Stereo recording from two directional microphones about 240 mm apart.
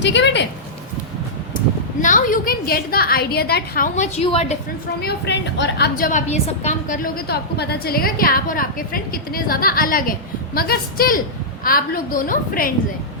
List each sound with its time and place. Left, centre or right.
0.0 s speech: left
2.0 s a woman's voice: left
5.0 s a woman's voice: left